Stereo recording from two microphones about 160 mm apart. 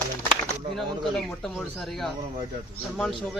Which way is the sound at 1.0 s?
Centre (ahead or behind).